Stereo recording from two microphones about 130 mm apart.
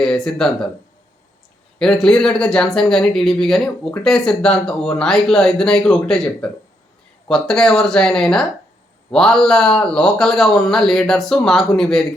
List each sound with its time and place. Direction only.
0.0 s speech: 5° left (ahead or behind)
1.8 s speech: 5° left (ahead or behind)